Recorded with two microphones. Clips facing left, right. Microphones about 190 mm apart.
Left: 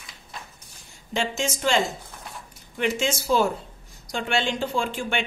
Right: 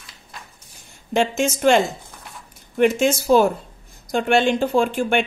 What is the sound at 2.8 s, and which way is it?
A woman's voice, 55° right (ahead or behind).